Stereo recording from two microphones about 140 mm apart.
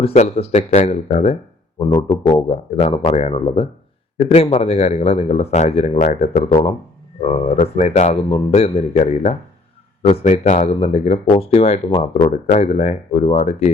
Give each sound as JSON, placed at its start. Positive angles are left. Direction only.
{"t": 0.0, "sound": "a man's voice", "side_deg": 45}
{"t": 1.8, "sound": "a man's voice", "side_deg": 35}